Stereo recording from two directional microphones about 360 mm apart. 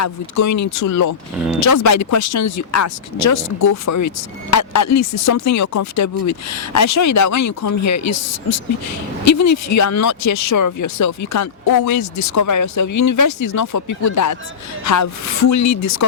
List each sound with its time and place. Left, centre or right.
0.0 s speech: left